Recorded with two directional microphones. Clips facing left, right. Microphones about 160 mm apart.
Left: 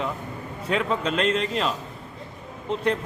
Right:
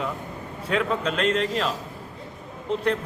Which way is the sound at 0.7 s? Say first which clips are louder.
Even; centre (ahead or behind).